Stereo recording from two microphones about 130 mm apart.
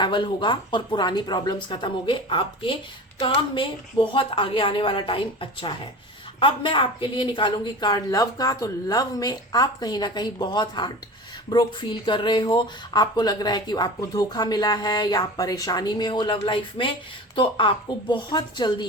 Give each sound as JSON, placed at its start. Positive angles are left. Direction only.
{"t": 0.0, "sound": "speech", "side_deg": 40}